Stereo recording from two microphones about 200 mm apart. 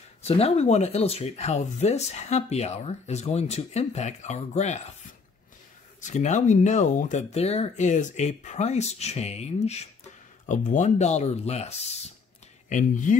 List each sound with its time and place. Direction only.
0.2 s speech: 30° left (ahead or behind)
5.9 s speech: 35° left (ahead or behind)